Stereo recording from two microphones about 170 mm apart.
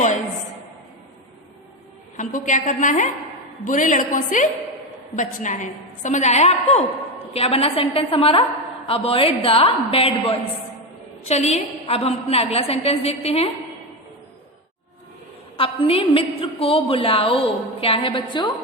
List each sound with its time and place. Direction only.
2.1 s a woman's voice: 50° left (ahead or behind)
15.5 s a woman's voice: 35° left (ahead or behind)